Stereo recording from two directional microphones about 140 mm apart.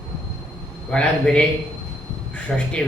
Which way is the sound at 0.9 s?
5° left (ahead or behind).